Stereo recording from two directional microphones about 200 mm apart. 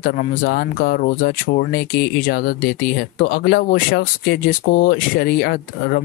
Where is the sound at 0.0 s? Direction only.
50° left (ahead or behind).